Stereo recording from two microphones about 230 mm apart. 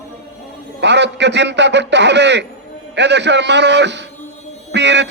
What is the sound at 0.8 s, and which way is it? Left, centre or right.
A man's voice, right.